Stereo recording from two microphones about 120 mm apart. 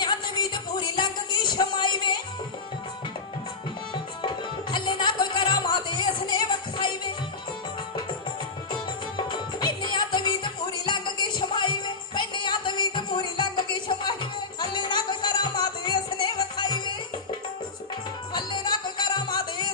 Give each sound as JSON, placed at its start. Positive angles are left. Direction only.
{"t": 0.0, "sound": "a sound", "side_deg": 40}
{"t": 4.2, "sound": "music", "side_deg": 40}
{"t": 9.1, "sound": "music", "side_deg": 40}
{"t": 18.3, "sound": "music", "side_deg": 40}